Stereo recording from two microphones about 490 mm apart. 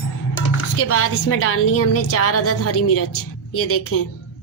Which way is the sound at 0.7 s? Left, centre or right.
Left.